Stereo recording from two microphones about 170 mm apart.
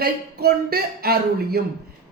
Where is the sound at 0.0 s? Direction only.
65° right (ahead or behind).